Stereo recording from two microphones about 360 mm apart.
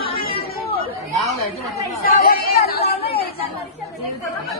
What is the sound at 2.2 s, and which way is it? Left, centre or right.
Chatter, left.